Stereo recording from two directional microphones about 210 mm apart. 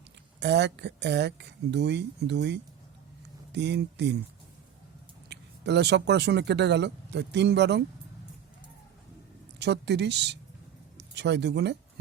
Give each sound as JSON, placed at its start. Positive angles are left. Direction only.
{"t": 0.3, "sound": "speech", "side_deg": -55}
{"t": 5.3, "sound": "speech", "side_deg": -55}
{"t": 9.6, "sound": "speech", "side_deg": -55}